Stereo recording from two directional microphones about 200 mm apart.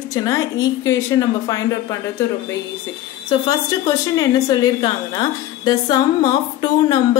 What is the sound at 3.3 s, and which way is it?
A woman's voice, 25° left (ahead or behind).